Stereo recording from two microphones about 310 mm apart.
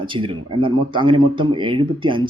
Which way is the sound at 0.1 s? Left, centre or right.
Centre.